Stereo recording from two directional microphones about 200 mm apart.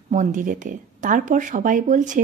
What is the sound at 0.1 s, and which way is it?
Speech, 40° right (ahead or behind).